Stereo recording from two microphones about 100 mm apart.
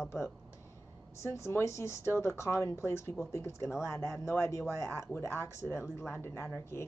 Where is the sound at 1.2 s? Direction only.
25° left (ahead or behind).